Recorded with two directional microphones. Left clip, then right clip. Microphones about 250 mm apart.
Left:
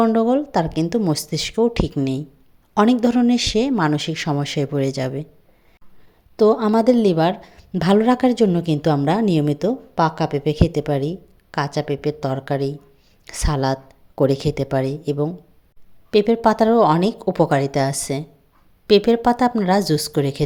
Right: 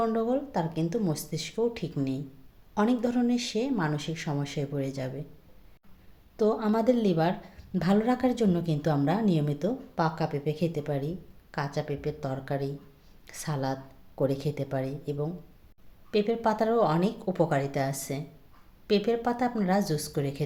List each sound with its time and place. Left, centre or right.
0.0 s a woman's voice: left
6.3 s a woman's voice: left